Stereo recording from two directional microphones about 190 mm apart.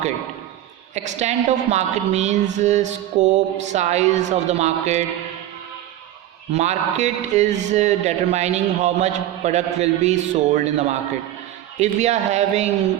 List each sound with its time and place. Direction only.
0.9 s a man's voice: 35° right (ahead or behind)
6.5 s a man's voice: 35° right (ahead or behind)